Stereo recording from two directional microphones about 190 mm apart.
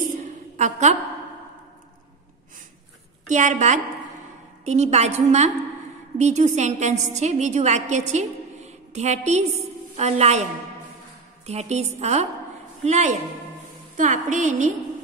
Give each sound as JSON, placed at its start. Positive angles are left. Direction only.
{"t": 0.6, "sound": "a woman's voice", "side_deg": -40}
{"t": 3.3, "sound": "a woman's voice", "side_deg": -40}
{"t": 11.4, "sound": "a woman's voice", "side_deg": -35}